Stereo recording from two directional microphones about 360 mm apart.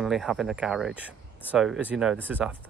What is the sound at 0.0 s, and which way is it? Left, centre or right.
Speech, centre.